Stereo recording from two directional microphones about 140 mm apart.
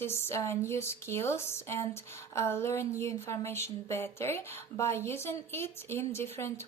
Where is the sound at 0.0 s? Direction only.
15° left (ahead or behind).